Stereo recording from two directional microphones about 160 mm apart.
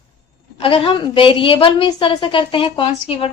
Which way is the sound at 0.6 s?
35° left (ahead or behind).